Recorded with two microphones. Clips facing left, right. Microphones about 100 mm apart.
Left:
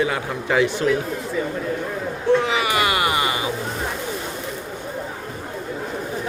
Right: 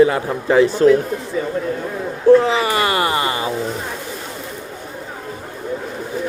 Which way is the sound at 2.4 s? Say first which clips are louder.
Right 3 dB; 35° right (ahead or behind).